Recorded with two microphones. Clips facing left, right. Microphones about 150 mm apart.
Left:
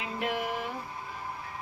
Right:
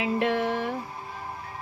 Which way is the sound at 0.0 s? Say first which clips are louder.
Right 7 dB; 80° right.